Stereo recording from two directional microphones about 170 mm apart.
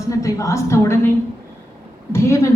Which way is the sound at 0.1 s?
20° left (ahead or behind).